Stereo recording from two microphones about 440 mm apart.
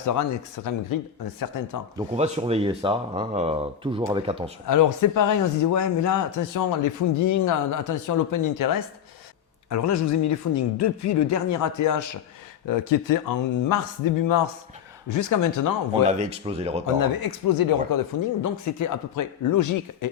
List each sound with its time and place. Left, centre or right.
0.0 s speech: left
2.0 s speech: centre
4.6 s speech: left
15.9 s speech: centre
16.8 s speech: left
18.4 s speech: left